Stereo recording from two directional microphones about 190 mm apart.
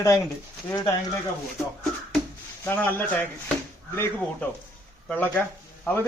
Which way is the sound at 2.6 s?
10° left (ahead or behind).